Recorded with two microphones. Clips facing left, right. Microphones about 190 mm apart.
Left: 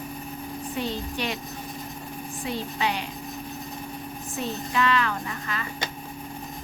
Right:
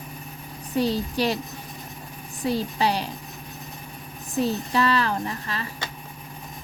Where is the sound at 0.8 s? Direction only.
35° right (ahead or behind).